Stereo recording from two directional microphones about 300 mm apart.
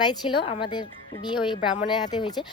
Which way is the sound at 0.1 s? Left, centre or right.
Centre.